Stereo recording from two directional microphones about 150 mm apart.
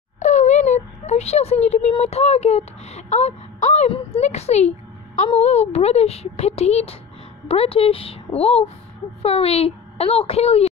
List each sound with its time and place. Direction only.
0.2 s a woman's voice: 50° left (ahead or behind)